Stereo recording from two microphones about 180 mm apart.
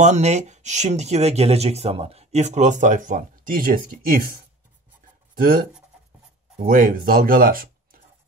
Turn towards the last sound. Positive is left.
turn(degrees=-50)  # may be behind; listen again after turning